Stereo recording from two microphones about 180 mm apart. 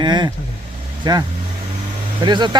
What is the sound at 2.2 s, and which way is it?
Speech, 25° right (ahead or behind).